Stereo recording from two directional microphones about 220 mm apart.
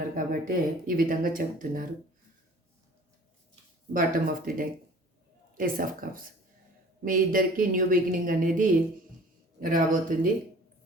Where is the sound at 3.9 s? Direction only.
40° right (ahead or behind).